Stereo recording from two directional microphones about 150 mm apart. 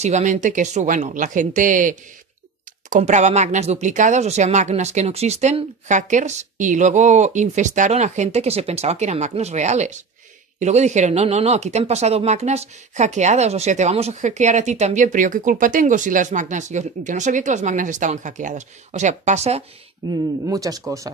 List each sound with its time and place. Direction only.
0.0 s speech: 50° right (ahead or behind)
20.1 s speech: 25° right (ahead or behind)